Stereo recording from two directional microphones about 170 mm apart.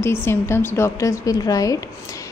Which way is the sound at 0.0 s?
15° left (ahead or behind).